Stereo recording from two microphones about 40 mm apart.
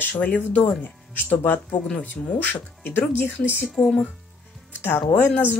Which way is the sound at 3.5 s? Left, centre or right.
Right.